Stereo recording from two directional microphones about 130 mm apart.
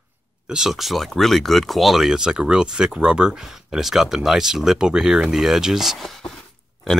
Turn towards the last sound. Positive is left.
turn(degrees=5)  # may be behind; listen again after turning